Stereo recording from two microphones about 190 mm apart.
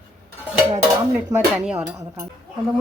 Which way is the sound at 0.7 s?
10° right (ahead or behind).